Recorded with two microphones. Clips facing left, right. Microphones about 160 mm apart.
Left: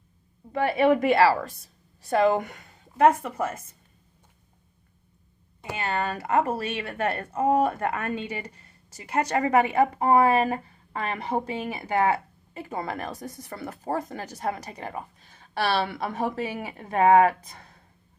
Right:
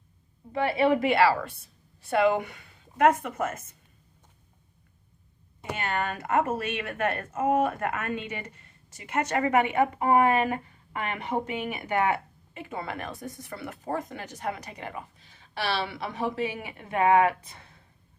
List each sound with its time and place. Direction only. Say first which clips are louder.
1.0 s a woman's voice: left 2 dB; 40° left (ahead or behind)
3.0 s a woman's voice: left 2 dB; 30° left (ahead or behind)
5.8 s a woman's voice: left 2 dB; 35° left (ahead or behind)